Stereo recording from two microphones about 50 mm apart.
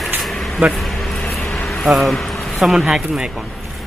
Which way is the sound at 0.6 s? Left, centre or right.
Right.